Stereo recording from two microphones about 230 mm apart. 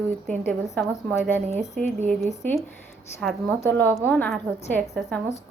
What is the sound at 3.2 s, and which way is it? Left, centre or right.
A woman's voice, centre.